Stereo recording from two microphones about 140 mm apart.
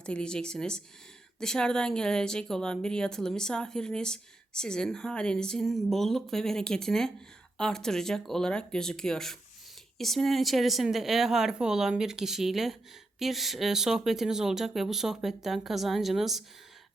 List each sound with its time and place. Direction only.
0.0 s speech: 5° left (ahead or behind)